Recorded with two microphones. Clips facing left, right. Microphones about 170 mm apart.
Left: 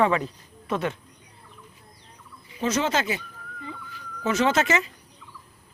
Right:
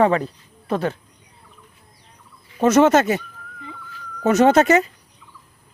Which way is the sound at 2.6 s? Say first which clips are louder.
Right 11 dB; 50° right (ahead or behind).